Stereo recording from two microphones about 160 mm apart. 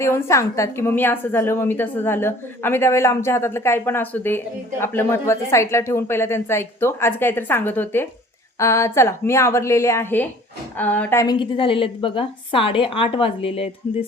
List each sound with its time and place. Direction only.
0.0 s a woman's voice: 15° left (ahead or behind)
11.3 s a woman's voice: 35° left (ahead or behind)